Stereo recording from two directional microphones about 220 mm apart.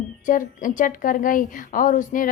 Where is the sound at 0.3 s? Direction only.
35° left (ahead or behind).